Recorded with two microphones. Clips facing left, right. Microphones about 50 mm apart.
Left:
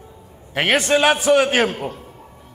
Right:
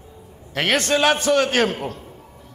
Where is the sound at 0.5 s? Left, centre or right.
Centre.